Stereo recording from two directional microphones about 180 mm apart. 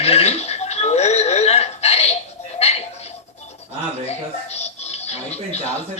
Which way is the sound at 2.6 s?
35° left (ahead or behind).